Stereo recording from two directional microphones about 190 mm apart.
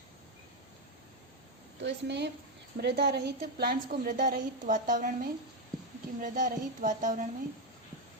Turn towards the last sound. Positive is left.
turn(degrees=-40)  # may be behind; listen again after turning